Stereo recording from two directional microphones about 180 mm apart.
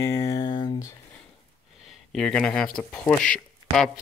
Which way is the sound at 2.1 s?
5° left (ahead or behind).